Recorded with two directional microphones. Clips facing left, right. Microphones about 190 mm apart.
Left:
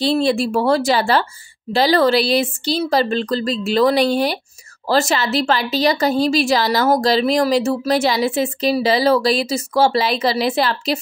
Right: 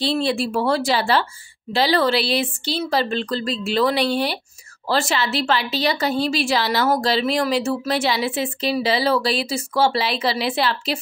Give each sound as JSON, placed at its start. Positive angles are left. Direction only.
{"t": 0.0, "sound": "a woman's voice", "side_deg": 45}